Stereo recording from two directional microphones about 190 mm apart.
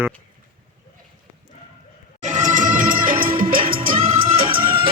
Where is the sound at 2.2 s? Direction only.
40° right (ahead or behind).